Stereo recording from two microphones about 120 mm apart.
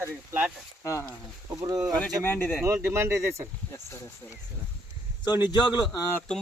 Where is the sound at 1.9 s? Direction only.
15° left (ahead or behind).